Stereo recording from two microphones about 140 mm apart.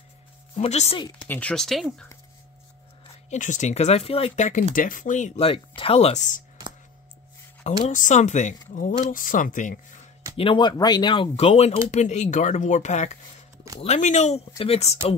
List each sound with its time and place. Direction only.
0.6 s speech: 50° left (ahead or behind)
1.2 s speech: 10° left (ahead or behind)
3.3 s speech: 60° left (ahead or behind); by 4.5 s 45° left (ahead or behind)
4.7 s speech: 75° left (ahead or behind)
5.8 s speech: 45° left (ahead or behind)
7.6 s speech: 60° left (ahead or behind)
8.7 s speech: 70° left (ahead or behind)
10.3 s speech: 40° left (ahead or behind)
11.9 s speech: 55° left (ahead or behind)